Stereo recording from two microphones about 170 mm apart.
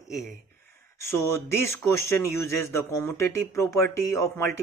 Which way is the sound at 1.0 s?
15° left (ahead or behind).